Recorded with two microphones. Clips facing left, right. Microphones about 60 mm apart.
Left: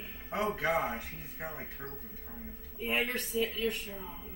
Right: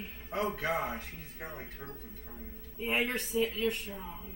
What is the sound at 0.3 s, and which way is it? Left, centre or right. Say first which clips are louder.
Speech: left 1 dB; left.